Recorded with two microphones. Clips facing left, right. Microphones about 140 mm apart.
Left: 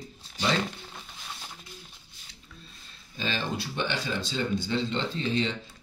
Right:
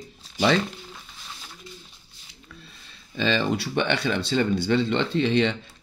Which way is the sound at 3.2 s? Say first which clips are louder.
Right 8 dB; 85° right.